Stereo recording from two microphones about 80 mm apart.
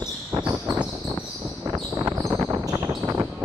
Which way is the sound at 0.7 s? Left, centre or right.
Right.